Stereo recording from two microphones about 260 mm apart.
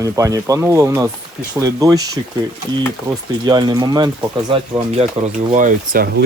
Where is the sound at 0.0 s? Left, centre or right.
Centre.